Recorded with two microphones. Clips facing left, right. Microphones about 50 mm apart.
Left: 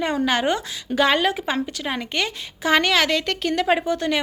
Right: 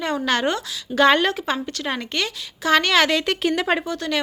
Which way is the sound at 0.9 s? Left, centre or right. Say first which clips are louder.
Right 2 dB; centre.